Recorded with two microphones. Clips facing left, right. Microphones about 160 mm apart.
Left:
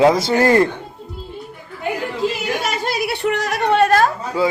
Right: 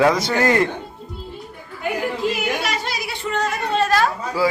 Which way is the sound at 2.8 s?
65° left (ahead or behind).